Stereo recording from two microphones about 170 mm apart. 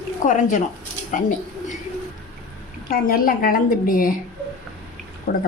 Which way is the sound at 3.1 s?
55° left (ahead or behind).